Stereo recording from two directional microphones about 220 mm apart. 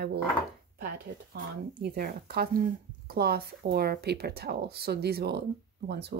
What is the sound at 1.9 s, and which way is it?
Speech, 45° right (ahead or behind).